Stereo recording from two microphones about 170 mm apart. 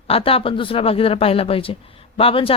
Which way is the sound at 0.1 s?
35° left (ahead or behind).